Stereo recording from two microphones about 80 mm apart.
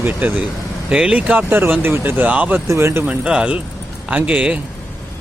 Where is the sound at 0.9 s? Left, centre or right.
Centre.